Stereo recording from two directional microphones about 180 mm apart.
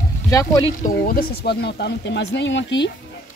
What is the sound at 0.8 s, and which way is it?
Speech, 55° left (ahead or behind).